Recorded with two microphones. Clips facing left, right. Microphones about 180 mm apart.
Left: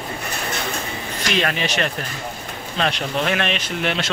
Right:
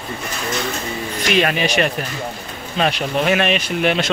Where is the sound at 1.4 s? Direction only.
15° right (ahead or behind).